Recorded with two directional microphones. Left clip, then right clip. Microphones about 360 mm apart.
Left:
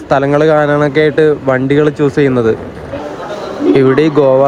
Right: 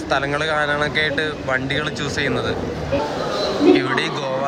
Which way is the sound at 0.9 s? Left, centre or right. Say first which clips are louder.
Left 9 dB; centre.